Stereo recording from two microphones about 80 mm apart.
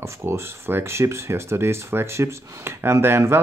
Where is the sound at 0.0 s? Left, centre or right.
Right.